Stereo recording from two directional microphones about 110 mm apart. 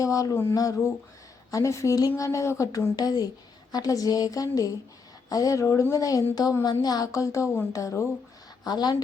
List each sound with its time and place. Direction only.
0.0 s a woman's voice: 30° left (ahead or behind)